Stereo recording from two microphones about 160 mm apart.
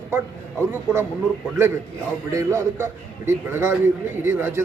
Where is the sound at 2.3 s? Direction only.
20° right (ahead or behind).